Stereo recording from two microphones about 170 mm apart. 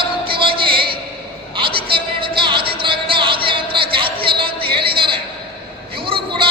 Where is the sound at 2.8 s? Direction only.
30° right (ahead or behind).